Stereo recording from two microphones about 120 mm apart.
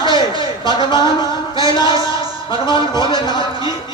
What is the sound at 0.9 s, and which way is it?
A man's voice, 40° left (ahead or behind).